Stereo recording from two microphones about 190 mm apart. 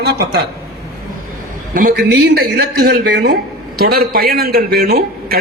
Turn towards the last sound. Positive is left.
turn(degrees=-55)  # may be behind; listen again after turning